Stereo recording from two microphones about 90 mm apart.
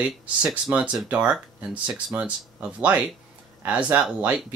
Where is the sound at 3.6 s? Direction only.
15° right (ahead or behind).